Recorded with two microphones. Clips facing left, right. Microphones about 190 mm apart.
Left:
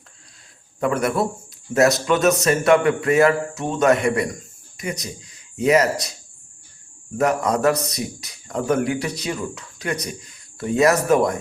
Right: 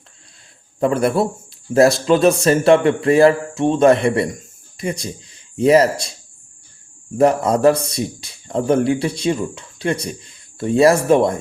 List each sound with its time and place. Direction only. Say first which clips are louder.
0.8 s a man's voice: right 4 dB; 30° right (ahead or behind)
7.2 s a man's voice: right 5 dB; 30° right (ahead or behind)